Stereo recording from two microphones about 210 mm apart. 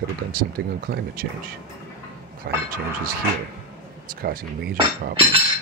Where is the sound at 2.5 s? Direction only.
50° right (ahead or behind).